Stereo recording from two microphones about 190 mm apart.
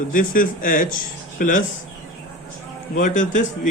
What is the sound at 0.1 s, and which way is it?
Speech, 45° left (ahead or behind).